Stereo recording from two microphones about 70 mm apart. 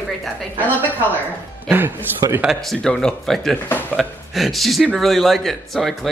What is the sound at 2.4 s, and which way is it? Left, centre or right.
Speech, centre.